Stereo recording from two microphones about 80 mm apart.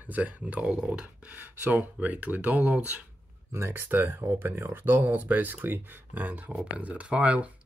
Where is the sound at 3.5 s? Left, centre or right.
Right.